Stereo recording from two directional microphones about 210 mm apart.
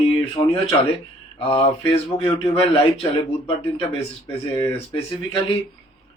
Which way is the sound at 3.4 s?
25° left (ahead or behind).